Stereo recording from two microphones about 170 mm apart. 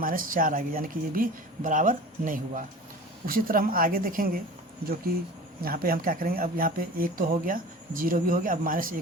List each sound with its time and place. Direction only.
0.0 s speech: 55° right (ahead or behind)
5.6 s speech: 60° right (ahead or behind)